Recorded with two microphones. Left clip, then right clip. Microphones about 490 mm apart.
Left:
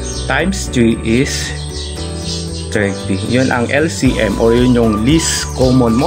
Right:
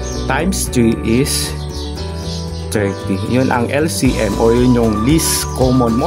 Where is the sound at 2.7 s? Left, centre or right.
Right.